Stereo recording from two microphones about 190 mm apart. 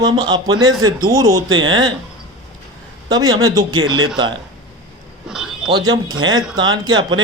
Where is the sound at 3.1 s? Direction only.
20° right (ahead or behind).